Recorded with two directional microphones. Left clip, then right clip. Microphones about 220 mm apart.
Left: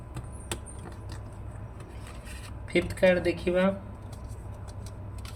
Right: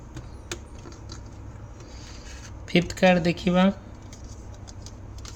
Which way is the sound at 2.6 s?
40° right (ahead or behind).